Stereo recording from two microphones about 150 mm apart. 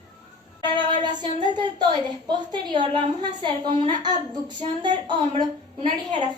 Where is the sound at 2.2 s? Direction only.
30° right (ahead or behind).